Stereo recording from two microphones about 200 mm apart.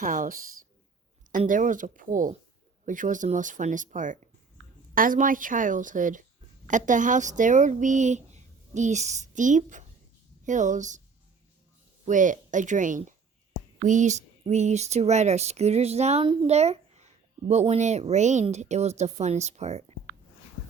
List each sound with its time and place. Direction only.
0.0 s speech: 40° right (ahead or behind)
12.0 s speech: 40° right (ahead or behind)